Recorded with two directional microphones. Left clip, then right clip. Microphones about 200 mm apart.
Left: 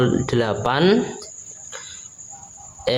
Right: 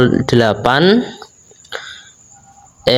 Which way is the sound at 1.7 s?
30° right (ahead or behind).